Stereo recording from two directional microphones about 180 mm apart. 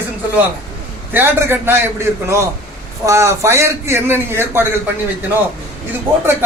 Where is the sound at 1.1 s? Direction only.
10° right (ahead or behind).